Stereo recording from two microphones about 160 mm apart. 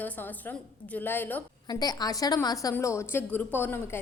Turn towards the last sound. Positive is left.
turn(degrees=15)  # may be behind; listen again after turning